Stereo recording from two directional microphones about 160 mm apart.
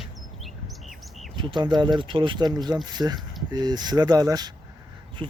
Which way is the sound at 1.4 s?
30° right (ahead or behind).